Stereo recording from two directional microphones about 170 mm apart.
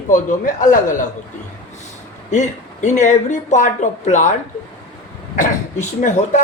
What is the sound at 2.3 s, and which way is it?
A man's voice, 45° left (ahead or behind).